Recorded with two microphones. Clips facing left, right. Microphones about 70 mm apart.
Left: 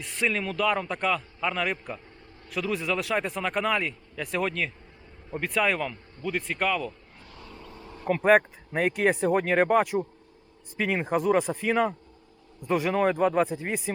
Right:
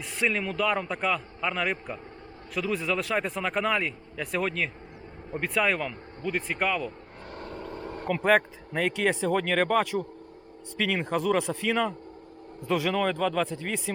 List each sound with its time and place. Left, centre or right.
0.0 s a man's voice: centre
7.3 s vehicle: right
8.2 s a man's voice: centre
12.9 s speech: centre
13.4 s a man's voice: centre